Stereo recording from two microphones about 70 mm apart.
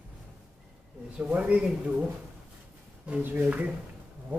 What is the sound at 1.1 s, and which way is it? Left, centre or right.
Speech, centre.